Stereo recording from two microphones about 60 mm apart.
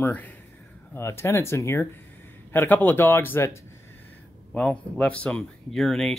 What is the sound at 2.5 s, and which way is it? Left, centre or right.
Speech, left.